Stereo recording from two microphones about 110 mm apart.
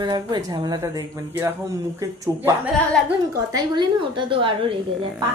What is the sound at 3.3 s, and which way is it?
A woman's voice, 40° right (ahead or behind).